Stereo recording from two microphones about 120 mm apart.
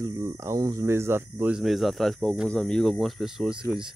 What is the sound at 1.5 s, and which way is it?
Speech, centre (ahead or behind).